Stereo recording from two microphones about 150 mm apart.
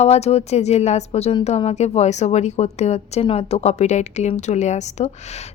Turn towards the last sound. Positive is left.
turn(degrees=50)  # may be behind; listen again after turning